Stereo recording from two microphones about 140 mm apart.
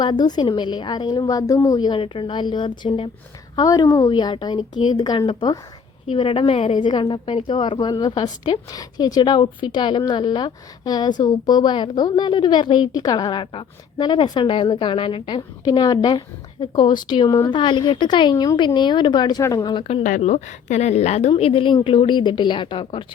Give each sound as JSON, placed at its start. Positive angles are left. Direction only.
{"t": 0.0, "sound": "a woman's voice", "side_deg": 30}
{"t": 17.5, "sound": "a woman's voice", "side_deg": 35}
{"t": 20.0, "sound": "a woman's voice", "side_deg": 65}